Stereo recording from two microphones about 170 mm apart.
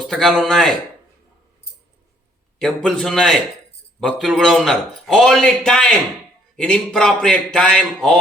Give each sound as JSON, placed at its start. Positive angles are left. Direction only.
{"t": 0.0, "sound": "a man's voice", "side_deg": 0}
{"t": 2.6, "sound": "a man's voice", "side_deg": 5}